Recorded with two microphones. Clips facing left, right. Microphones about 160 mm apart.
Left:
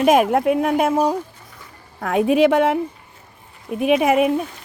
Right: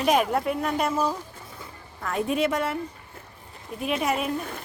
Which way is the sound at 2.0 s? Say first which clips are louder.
Left 9 dB; 80° left.